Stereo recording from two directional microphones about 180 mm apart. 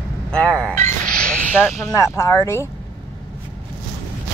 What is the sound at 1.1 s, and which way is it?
Speech, 5° left (ahead or behind).